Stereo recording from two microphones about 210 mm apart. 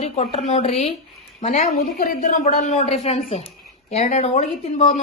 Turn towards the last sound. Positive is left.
turn(degrees=35)  # may be behind; listen again after turning